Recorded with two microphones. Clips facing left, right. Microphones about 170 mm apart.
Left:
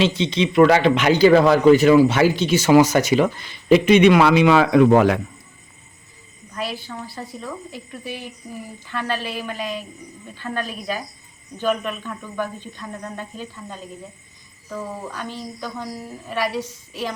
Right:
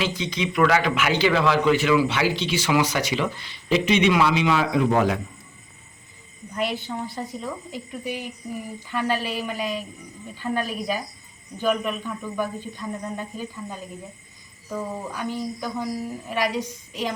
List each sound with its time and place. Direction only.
0.0 s a man's voice: 25° left (ahead or behind); by 5.2 s 65° left (ahead or behind)
6.6 s a woman's voice: 20° right (ahead or behind)